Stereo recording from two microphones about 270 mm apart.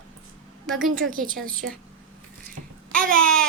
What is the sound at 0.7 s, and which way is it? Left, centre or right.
Speech, right.